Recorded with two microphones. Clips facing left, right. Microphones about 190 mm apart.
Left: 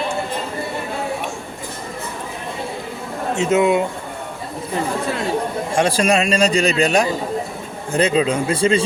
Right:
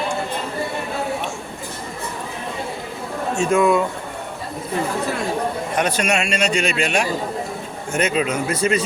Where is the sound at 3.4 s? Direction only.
20° left (ahead or behind).